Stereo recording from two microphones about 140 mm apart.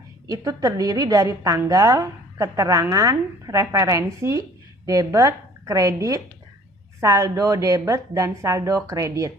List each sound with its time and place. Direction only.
0.3 s a woman's voice: 25° right (ahead or behind)